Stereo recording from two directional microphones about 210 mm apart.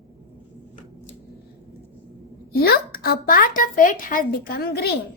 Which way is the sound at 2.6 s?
45° left (ahead or behind).